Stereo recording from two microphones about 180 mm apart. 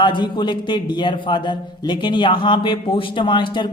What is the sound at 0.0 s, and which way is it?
Speech, 25° left (ahead or behind).